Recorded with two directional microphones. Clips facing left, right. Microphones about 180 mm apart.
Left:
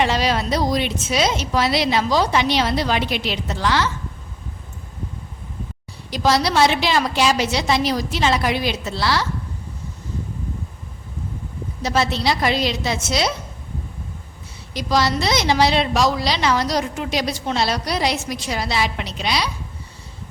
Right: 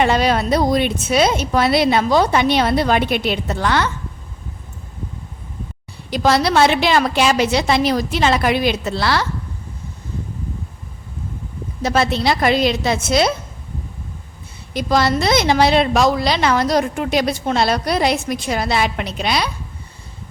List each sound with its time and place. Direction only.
0.0 s a woman's voice: 55° right (ahead or behind)
6.1 s a woman's voice: 55° right (ahead or behind)
11.8 s a woman's voice: 55° right (ahead or behind)
14.7 s a woman's voice: 55° right (ahead or behind)